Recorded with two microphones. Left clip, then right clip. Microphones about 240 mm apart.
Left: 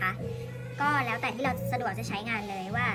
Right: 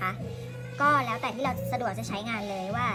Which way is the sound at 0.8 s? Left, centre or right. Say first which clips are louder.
Right 3 dB; centre.